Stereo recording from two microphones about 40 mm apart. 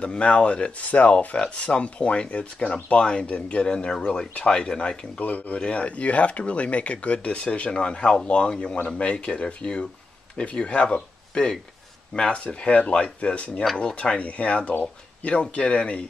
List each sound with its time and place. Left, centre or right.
0.0 s speech: left
5.2 s speech: left
12.2 s speech: left